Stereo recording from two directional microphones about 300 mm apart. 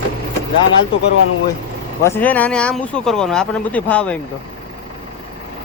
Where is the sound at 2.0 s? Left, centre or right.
Centre.